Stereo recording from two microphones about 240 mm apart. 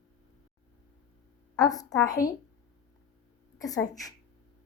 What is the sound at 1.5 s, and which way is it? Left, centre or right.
Speech, centre.